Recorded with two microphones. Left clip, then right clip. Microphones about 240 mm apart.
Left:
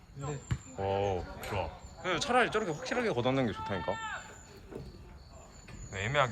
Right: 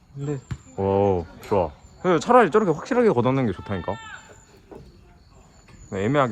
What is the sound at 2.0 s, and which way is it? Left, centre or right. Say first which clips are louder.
Speech: right 12 dB; centre.